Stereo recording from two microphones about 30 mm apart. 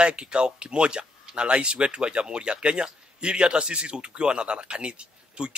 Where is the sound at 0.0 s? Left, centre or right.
Right.